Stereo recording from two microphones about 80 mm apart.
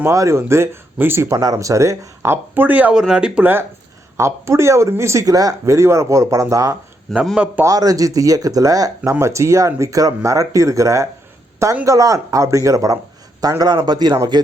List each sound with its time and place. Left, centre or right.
0.1 s speech: right
1.3 s speech: right; by 3.4 s centre
3.4 s speech: right
5.2 s speech: right
7.3 s speech: centre
7.6 s speech: right
13.6 s speech: right